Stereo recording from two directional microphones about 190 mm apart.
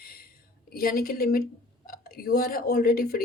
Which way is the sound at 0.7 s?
50° left (ahead or behind).